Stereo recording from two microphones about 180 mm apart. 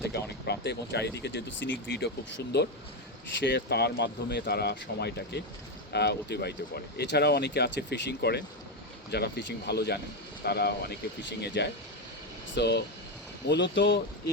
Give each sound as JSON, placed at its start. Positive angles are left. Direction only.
{"t": 0.0, "sound": "speech", "side_deg": 65}